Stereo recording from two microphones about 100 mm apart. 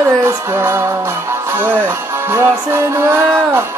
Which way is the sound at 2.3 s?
30° right (ahead or behind).